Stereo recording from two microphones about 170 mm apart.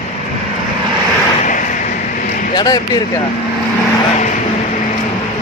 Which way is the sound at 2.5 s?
20° left (ahead or behind).